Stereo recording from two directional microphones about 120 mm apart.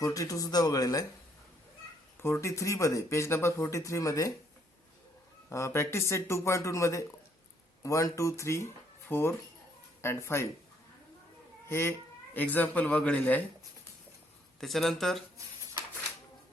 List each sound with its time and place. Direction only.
0.0 s speech: 30° left (ahead or behind)
2.1 s speech: 20° left (ahead or behind)
5.5 s speech: 25° left (ahead or behind)
11.7 s speech: 20° left (ahead or behind)
14.6 s speech: centre (ahead or behind)